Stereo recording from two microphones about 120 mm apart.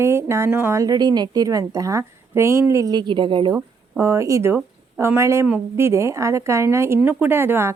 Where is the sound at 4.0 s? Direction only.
25° right (ahead or behind).